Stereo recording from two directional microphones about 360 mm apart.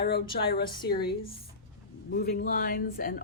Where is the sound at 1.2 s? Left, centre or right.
Centre.